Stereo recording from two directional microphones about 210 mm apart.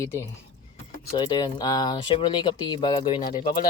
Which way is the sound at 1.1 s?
20° left (ahead or behind).